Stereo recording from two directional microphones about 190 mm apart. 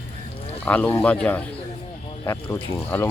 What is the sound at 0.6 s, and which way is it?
Speech, 10° left (ahead or behind).